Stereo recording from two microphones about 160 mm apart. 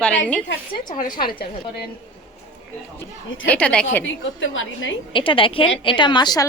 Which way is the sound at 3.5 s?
5° left (ahead or behind).